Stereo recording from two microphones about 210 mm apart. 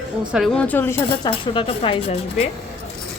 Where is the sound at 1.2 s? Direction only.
25° left (ahead or behind).